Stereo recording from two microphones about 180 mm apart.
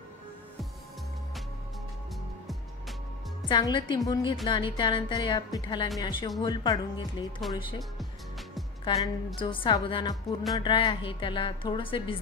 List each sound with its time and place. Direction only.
3.4 s a woman's voice: 25° left (ahead or behind)
8.8 s a woman's voice: 25° left (ahead or behind)